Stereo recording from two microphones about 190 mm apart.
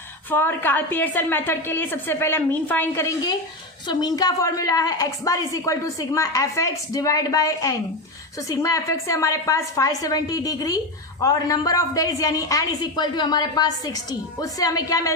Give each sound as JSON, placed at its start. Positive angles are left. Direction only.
{"t": 0.3, "sound": "a woman's voice", "side_deg": 10}